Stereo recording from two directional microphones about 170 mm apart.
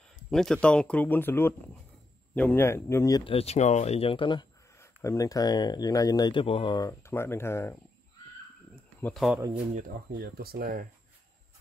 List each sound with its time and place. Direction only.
0.3 s speech: 5° left (ahead or behind); by 3.3 s 20° left (ahead or behind)
3.3 s speech: 40° left (ahead or behind)
4.7 s speech: 20° left (ahead or behind)
9.0 s speech: centre (ahead or behind)
9.8 s speech: 60° right (ahead or behind)